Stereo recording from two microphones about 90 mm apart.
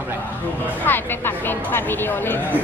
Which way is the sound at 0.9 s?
25° left (ahead or behind).